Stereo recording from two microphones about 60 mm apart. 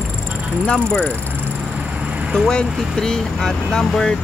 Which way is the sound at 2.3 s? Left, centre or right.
Centre.